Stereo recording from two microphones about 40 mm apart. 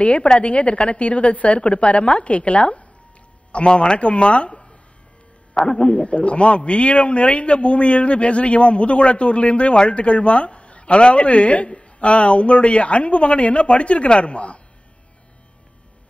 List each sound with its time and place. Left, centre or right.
0.0 s speech: left